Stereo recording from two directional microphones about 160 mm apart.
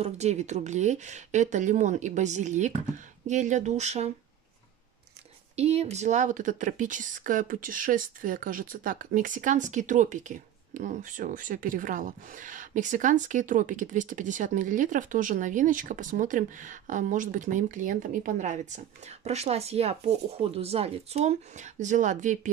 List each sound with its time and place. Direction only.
0.0 s speech: 45° right (ahead or behind)
5.6 s speech: 40° right (ahead or behind)